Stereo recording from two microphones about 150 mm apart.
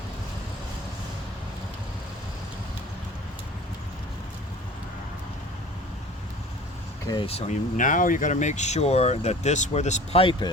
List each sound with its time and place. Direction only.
7.1 s speech: 35° left (ahead or behind)
7.8 s speech: 60° left (ahead or behind); by 10.5 s 35° left (ahead or behind)